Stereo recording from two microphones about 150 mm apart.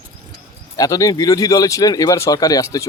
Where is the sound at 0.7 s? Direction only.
25° left (ahead or behind).